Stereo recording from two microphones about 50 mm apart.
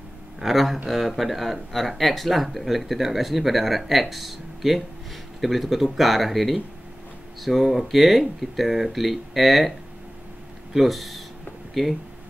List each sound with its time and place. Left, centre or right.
0.4 s speech: centre